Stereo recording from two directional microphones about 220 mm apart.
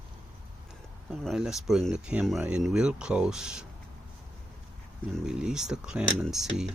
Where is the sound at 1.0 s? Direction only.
Centre (ahead or behind).